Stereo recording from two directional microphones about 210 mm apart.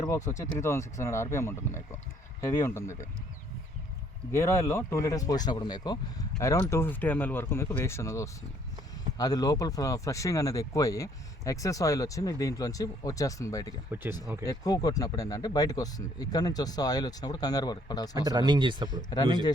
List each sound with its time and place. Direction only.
0.0 s speech: 15° left (ahead or behind)
4.3 s speech: 15° left (ahead or behind)
13.9 s speech: 10° right (ahead or behind)
14.4 s speech: 15° left (ahead or behind)
18.3 s speech: 20° right (ahead or behind)